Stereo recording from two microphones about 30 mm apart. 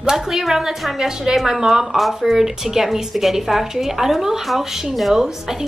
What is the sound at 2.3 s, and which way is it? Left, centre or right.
A woman's voice, centre.